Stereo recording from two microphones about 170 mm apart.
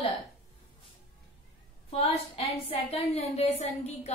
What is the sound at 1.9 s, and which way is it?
A woman's voice, 35° left (ahead or behind).